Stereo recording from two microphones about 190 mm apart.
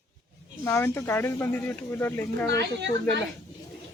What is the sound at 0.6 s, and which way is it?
Speech, 10° left (ahead or behind).